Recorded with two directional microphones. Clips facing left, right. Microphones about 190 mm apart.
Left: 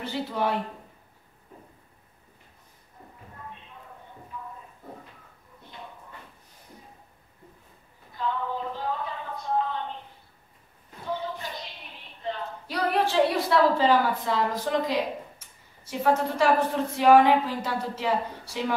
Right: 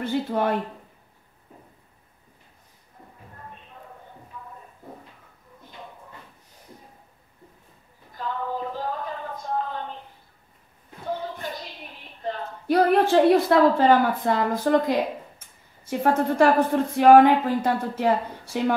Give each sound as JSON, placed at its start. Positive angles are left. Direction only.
{"t": 0.0, "sound": "speech", "side_deg": -50}
{"t": 8.1, "sound": "a sound", "side_deg": -45}
{"t": 12.2, "sound": "speech", "side_deg": -50}